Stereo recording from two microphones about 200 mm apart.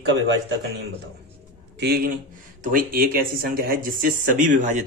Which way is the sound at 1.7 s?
50° right (ahead or behind).